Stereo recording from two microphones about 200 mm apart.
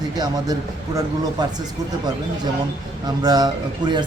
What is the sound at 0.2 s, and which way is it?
Speech, 20° right (ahead or behind).